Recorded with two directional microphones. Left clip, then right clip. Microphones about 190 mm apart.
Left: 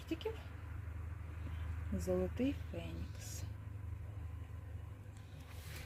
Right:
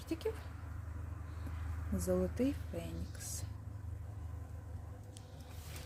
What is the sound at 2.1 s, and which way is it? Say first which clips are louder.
Speech: right 2 dB; 5° right (ahead or behind).